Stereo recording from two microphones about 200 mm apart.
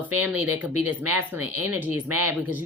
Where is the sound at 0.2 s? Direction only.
10° right (ahead or behind).